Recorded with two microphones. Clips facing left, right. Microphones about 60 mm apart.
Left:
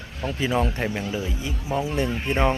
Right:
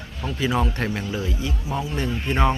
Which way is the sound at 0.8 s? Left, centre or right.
Centre.